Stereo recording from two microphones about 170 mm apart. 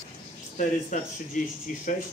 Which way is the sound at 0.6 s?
50° left (ahead or behind).